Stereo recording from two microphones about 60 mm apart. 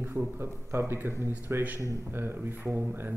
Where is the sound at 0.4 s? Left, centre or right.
Right.